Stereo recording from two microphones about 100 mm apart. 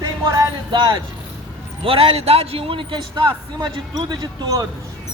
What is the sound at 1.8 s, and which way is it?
A man's voice, 65° right (ahead or behind).